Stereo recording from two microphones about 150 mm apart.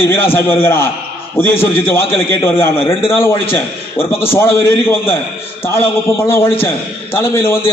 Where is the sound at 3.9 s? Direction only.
40° left (ahead or behind).